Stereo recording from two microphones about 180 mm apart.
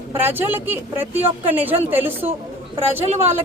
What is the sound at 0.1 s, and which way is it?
Speech, 10° right (ahead or behind).